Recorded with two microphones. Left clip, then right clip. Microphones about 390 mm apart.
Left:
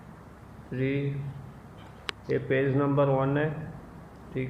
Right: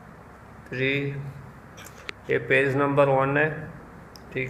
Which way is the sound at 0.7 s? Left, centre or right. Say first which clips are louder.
Right 5 dB; right.